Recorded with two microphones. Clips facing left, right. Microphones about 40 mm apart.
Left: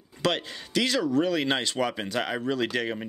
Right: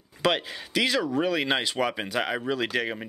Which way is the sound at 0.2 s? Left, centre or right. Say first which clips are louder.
Right 2 dB; centre.